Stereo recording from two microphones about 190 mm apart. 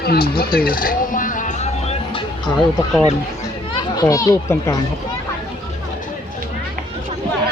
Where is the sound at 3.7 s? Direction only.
20° left (ahead or behind).